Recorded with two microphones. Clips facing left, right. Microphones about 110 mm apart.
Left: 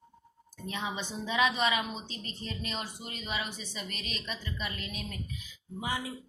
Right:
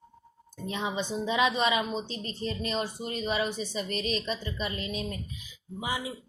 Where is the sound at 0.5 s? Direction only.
20° right (ahead or behind).